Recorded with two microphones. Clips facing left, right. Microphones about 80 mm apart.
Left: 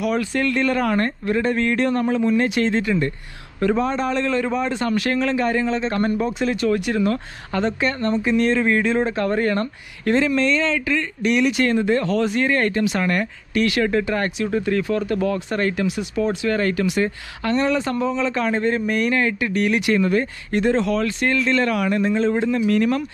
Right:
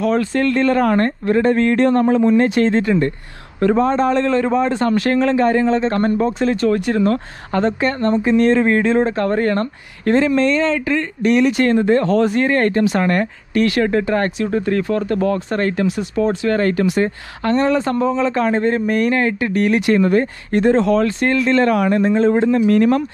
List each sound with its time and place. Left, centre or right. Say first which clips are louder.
0.0 s speech: right 4 dB; right
22.3 s speech: right 5 dB; right
22.7 s speech: right 5 dB; right